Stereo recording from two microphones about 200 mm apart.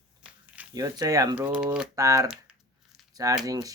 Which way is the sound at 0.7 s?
20° right (ahead or behind).